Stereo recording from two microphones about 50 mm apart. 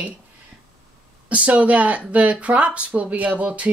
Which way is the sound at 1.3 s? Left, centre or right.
Right.